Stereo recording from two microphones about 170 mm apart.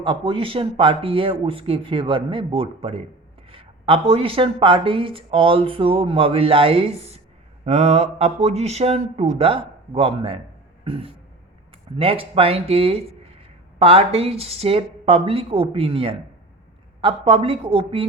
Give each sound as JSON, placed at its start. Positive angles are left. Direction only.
{"t": 0.0, "sound": "speech", "side_deg": -30}